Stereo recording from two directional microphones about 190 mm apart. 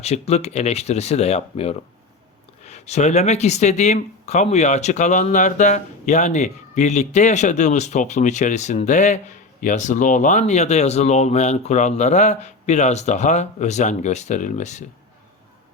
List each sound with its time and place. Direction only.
0.0 s speech: 35° left (ahead or behind)